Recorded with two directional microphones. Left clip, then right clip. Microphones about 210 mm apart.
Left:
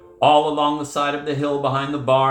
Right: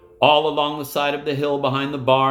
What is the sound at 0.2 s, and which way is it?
Speech, 50° right (ahead or behind).